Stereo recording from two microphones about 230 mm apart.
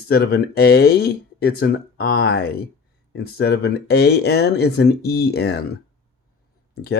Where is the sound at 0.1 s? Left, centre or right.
Left.